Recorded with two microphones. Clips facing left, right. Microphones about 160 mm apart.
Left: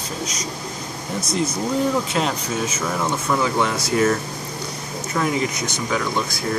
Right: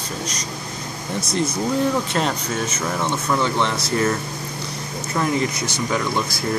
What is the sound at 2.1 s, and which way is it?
Speech, 5° left (ahead or behind).